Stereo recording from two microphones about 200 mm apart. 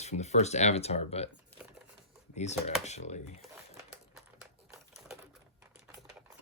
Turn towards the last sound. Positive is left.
turn(degrees=0)  # may be behind; listen again after turning